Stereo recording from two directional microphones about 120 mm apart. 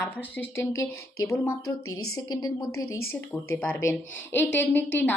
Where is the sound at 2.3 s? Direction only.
35° left (ahead or behind).